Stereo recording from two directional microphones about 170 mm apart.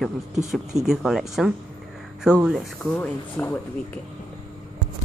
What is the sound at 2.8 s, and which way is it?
Speech, 10° left (ahead or behind).